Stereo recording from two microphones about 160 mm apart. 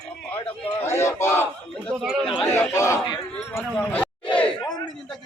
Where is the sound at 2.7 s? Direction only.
20° left (ahead or behind).